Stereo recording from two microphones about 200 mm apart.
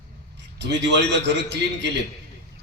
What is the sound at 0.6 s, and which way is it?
Speech, 60° right (ahead or behind).